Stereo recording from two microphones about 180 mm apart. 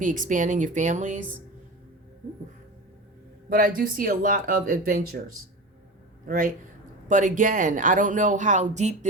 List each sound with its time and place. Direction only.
0.0 s speech: 45° right (ahead or behind)
3.5 s speech: 50° right (ahead or behind)
6.2 s speech: 50° right (ahead or behind)